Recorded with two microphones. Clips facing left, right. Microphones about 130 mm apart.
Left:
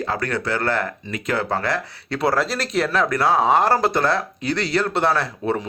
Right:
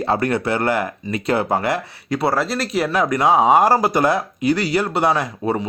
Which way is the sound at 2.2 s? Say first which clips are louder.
Even; centre (ahead or behind).